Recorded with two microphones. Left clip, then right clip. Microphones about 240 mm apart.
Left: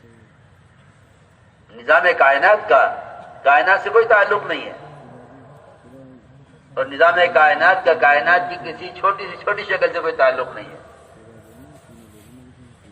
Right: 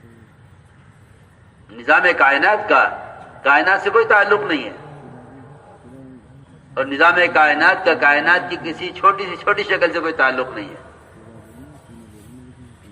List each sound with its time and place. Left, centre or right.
1.7 s a man's voice: right
6.7 s a man's voice: right